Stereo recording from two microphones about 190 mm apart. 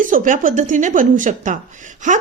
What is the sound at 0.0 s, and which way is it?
A woman's voice, 45° right (ahead or behind).